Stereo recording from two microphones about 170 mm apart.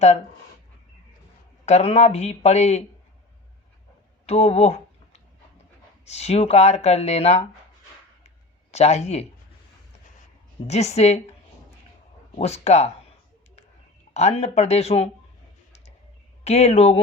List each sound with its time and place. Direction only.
1.6 s speech: 40° left (ahead or behind)
4.3 s a sound: 40° left (ahead or behind)
6.1 s speech: 40° left (ahead or behind)
8.7 s speech: 40° left (ahead or behind)
10.7 s speech: 40° left (ahead or behind)
12.4 s speech: 40° left (ahead or behind)
14.1 s speech: 40° left (ahead or behind)
16.4 s speech: 40° left (ahead or behind)